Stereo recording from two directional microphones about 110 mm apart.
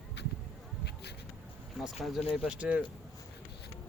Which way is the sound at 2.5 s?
10° right (ahead or behind).